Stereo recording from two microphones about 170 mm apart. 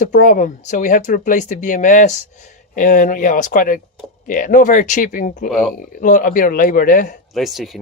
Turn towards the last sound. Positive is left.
turn(degrees=0)  # may be behind; listen again after turning